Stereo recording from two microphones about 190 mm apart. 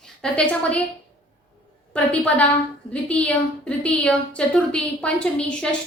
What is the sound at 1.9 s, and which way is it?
A woman's voice, 5° left (ahead or behind).